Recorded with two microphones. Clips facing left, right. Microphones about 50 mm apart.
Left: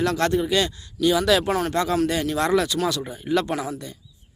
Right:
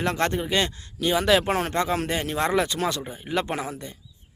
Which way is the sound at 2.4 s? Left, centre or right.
Right.